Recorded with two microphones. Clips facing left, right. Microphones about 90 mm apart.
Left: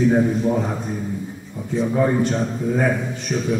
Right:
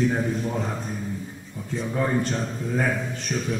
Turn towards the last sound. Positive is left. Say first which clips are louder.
# left 5 dB
turn(degrees=5)  # may be behind; listen again after turning